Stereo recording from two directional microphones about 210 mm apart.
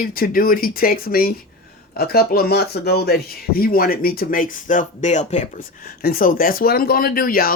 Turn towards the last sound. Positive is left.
turn(degrees=45)  # may be behind; listen again after turning